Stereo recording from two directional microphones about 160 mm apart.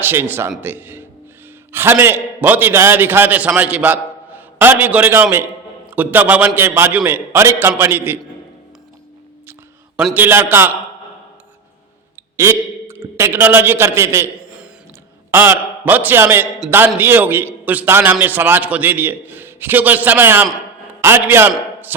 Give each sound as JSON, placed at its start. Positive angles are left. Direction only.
{"t": 0.0, "sound": "a man's voice", "side_deg": -15}
{"t": 10.2, "sound": "a man's voice", "side_deg": -15}
{"t": 12.4, "sound": "a man's voice", "side_deg": -15}
{"t": 14.4, "sound": "a sound", "side_deg": -5}
{"t": 15.3, "sound": "a man's voice", "side_deg": -15}
{"t": 21.5, "sound": "a sound", "side_deg": -10}